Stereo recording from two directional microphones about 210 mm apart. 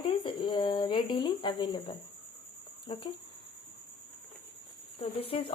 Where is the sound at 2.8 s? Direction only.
25° left (ahead or behind).